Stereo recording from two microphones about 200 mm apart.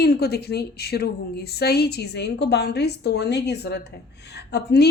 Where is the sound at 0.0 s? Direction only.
50° left (ahead or behind).